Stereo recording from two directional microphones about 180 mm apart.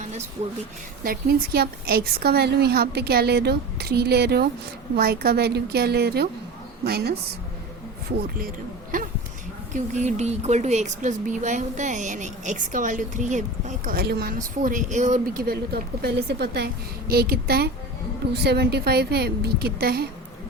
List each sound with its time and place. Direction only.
1.0 s a woman's voice: 55° right (ahead or behind)
9.7 s a woman's voice: 40° right (ahead or behind); by 20.1 s 60° right (ahead or behind)